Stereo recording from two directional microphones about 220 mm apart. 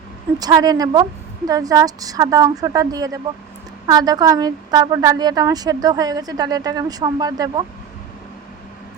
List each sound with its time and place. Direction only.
0.3 s a woman's voice: 15° right (ahead or behind)